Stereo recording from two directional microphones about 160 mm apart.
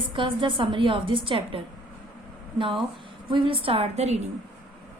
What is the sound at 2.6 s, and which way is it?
A woman's voice, 30° right (ahead or behind).